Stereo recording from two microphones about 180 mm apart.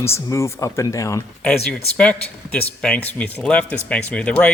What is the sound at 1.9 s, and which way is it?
Speech, 5° left (ahead or behind).